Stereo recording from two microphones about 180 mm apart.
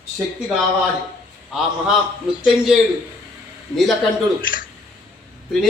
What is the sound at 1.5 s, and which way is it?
A man's voice, 5° right (ahead or behind).